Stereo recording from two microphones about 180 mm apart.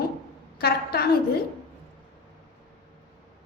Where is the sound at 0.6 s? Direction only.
60° left (ahead or behind).